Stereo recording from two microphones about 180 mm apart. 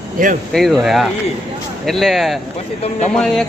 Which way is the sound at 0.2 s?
50° right (ahead or behind).